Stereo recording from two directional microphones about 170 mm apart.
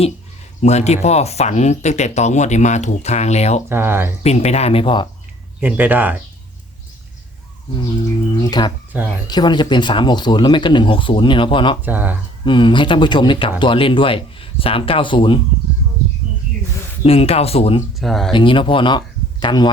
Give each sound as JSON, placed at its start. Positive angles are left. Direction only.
{"t": 0.6, "sound": "speech", "side_deg": 40}
{"t": 3.7, "sound": "speech", "side_deg": -15}
{"t": 4.2, "sound": "speech", "side_deg": 40}
{"t": 5.5, "sound": "speech", "side_deg": -10}
{"t": 8.4, "sound": "speech", "side_deg": 25}
{"t": 11.8, "sound": "speech", "side_deg": -10}
{"t": 12.5, "sound": "speech", "side_deg": 30}
{"t": 17.0, "sound": "speech", "side_deg": 35}
{"t": 18.0, "sound": "speech", "side_deg": 0}
{"t": 18.3, "sound": "speech", "side_deg": 30}